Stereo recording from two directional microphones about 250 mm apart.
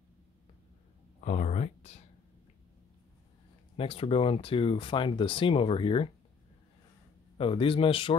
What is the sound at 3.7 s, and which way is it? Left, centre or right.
Speech, left.